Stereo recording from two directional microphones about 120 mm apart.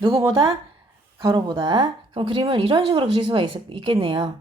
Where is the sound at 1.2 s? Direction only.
40° right (ahead or behind).